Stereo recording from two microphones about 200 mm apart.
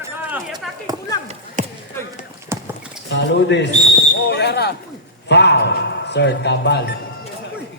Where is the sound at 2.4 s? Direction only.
15° right (ahead or behind).